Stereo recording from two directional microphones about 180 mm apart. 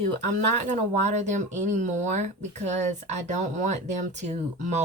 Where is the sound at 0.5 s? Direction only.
40° right (ahead or behind).